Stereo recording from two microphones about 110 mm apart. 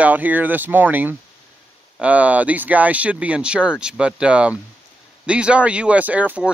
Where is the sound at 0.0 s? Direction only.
15° right (ahead or behind).